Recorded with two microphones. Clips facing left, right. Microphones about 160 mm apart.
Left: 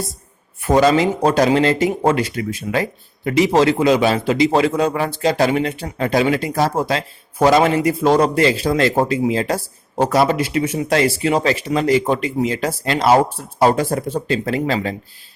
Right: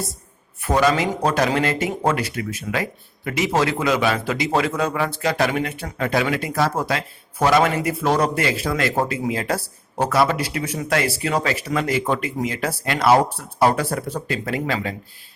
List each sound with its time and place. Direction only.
0.6 s speech: 30° left (ahead or behind)